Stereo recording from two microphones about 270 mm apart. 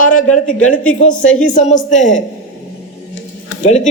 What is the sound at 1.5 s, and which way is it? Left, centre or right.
Speech, left.